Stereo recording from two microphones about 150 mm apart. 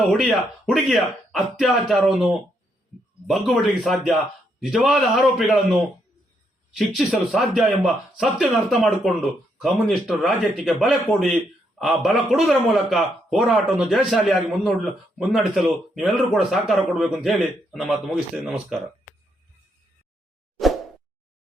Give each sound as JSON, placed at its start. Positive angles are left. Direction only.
{"t": 0.1, "sound": "a man's voice", "side_deg": 0}
{"t": 6.7, "sound": "a man's voice", "side_deg": 0}